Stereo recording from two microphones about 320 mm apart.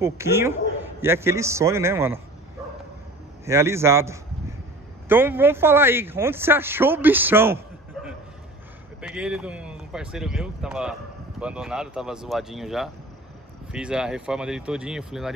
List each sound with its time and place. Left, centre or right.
0.0 s a man's voice: centre
3.4 s a man's voice: centre